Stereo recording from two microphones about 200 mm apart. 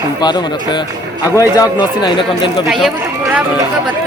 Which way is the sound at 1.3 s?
20° left (ahead or behind).